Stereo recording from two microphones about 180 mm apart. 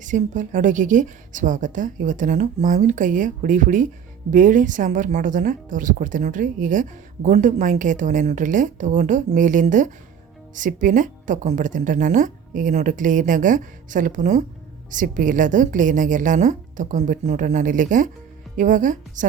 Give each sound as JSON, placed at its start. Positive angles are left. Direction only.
{"t": 0.0, "sound": "speech", "side_deg": -45}